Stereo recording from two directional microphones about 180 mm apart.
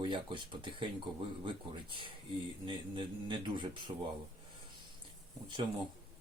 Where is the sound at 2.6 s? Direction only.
25° right (ahead or behind).